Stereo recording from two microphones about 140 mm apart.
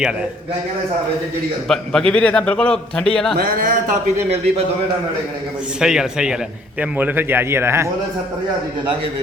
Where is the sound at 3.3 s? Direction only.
90° right; by 3.9 s 75° right (ahead or behind).